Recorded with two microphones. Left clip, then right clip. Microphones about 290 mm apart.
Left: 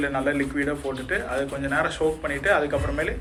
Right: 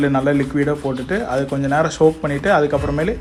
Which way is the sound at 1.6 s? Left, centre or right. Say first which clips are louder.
Right 9 dB; centre.